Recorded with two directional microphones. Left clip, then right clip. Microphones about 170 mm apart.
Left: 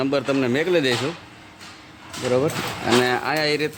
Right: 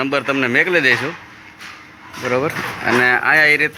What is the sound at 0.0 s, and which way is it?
Speech, 15° left (ahead or behind).